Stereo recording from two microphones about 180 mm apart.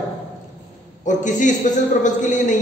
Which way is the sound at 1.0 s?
45° left (ahead or behind).